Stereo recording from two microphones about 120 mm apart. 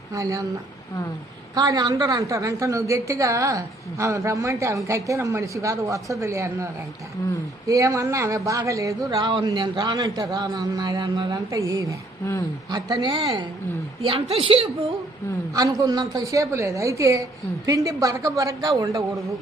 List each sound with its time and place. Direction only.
0.1 s a woman's voice: 25° right (ahead or behind)
1.5 s a woman's voice: 35° right (ahead or behind)
7.7 s speech: 25° right (ahead or behind)
12.2 s a woman's voice: 25° left (ahead or behind)
12.7 s a woman's voice: 40° right (ahead or behind)
15.5 s a woman's voice: 30° right (ahead or behind)